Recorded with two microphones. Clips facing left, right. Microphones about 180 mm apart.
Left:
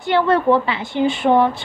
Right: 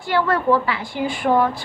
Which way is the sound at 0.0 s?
20° left (ahead or behind).